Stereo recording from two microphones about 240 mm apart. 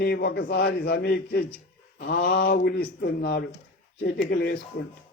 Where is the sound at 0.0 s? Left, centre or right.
Left.